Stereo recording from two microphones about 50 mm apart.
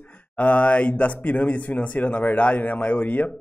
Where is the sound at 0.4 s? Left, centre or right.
Left.